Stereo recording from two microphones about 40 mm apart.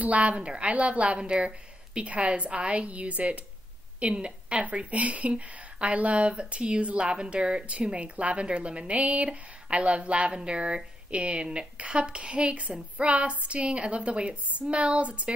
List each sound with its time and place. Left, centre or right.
0.0 s a woman's voice: right
0.4 s a woman's voice: right